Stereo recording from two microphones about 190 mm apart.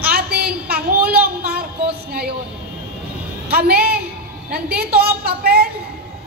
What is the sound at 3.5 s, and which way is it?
A woman's voice, 55° right (ahead or behind).